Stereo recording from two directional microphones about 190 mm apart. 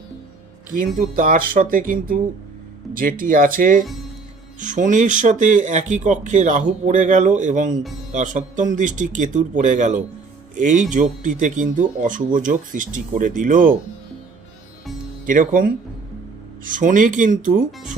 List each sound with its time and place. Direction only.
0.9 s speech: 45° right (ahead or behind)
15.3 s speech: 45° right (ahead or behind)